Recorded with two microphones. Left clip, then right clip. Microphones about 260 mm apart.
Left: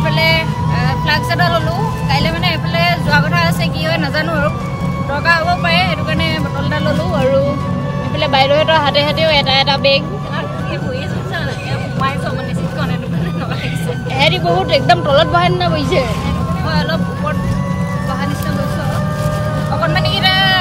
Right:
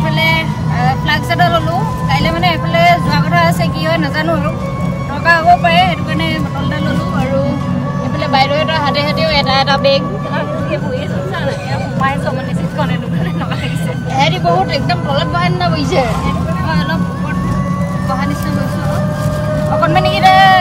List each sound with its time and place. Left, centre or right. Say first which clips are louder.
0.8 s music: right 2 dB; centre
2.2 s vehicle: right 3 dB; centre
5.3 s vehicle: right 5 dB; centre
8.3 s speech: left 1 dB; centre
14.7 s speech: left 5 dB; centre
19.9 s music: right 6 dB; centre